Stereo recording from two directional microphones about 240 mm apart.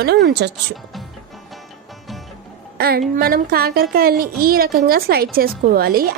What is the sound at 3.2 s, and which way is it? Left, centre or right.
A woman's voice, right.